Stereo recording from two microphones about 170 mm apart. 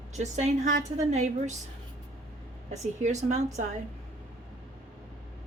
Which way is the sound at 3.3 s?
40° right (ahead or behind).